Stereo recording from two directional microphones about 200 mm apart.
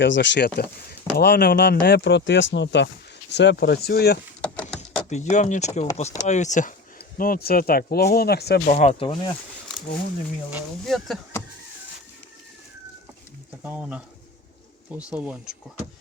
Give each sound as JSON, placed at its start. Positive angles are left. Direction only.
{"t": 0.0, "sound": "speech", "side_deg": 65}
{"t": 4.4, "sound": "a sound", "side_deg": 5}
{"t": 5.0, "sound": "speech", "side_deg": 35}
{"t": 8.6, "sound": "speech", "side_deg": 35}
{"t": 10.8, "sound": "speech", "side_deg": 0}
{"t": 13.7, "sound": "speech", "side_deg": -5}